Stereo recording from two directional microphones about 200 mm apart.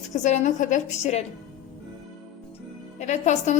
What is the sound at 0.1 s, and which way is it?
A woman's voice, 40° left (ahead or behind).